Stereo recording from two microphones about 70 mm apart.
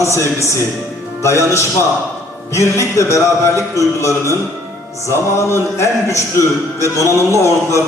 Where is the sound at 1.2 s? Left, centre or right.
Left.